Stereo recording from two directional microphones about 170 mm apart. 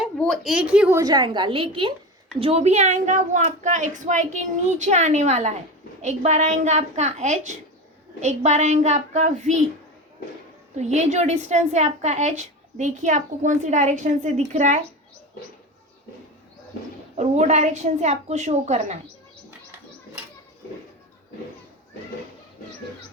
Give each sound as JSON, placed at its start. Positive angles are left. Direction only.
{"t": 0.2, "sound": "a woman's voice", "side_deg": 0}
{"t": 10.8, "sound": "a woman's voice", "side_deg": -40}
{"t": 17.2, "sound": "a woman's voice", "side_deg": -40}